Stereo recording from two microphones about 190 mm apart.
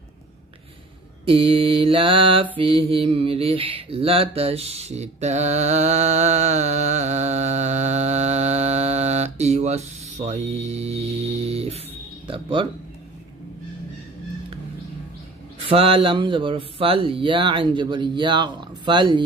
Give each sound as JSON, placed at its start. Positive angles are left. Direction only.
{"t": 1.2, "sound": "speech", "side_deg": -30}
{"t": 2.5, "sound": "mantra", "side_deg": -30}
{"t": 12.3, "sound": "speech", "side_deg": -25}
{"t": 15.7, "sound": "speech", "side_deg": -30}